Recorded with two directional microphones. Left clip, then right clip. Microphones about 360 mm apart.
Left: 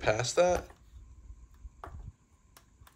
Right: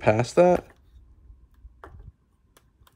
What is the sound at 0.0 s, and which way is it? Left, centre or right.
Speech, centre.